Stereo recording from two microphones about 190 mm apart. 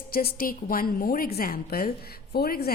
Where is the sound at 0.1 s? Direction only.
50° left (ahead or behind).